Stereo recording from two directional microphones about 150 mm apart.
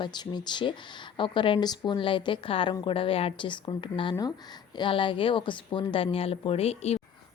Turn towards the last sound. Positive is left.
turn(degrees=45)  # may be behind; listen again after turning